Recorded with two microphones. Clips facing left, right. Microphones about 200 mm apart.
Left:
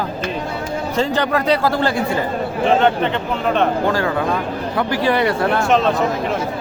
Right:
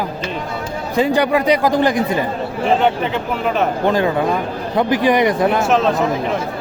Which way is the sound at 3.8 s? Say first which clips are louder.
Right 2 dB; 20° right (ahead or behind).